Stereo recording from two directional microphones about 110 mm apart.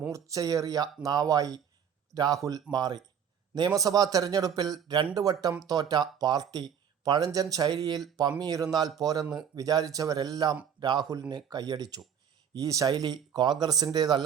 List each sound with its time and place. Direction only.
0.1 s speech: 30° right (ahead or behind)